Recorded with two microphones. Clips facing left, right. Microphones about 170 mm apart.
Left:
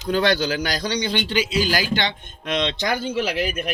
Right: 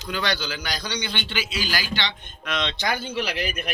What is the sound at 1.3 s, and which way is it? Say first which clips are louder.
Speech: left 9 dB; 20° left (ahead or behind).